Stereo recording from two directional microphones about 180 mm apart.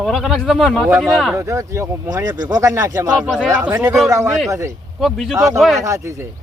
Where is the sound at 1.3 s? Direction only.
15° right (ahead or behind).